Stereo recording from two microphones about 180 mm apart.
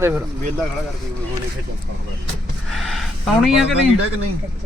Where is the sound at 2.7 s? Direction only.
Centre (ahead or behind).